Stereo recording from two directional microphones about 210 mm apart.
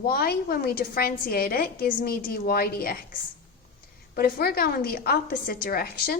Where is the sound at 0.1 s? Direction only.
45° left (ahead or behind).